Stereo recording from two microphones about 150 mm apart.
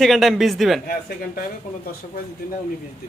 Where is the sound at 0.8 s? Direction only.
75° left (ahead or behind).